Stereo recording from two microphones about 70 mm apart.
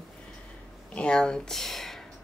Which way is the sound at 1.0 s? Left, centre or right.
Centre.